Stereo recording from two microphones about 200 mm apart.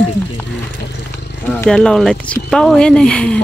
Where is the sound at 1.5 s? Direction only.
5° left (ahead or behind).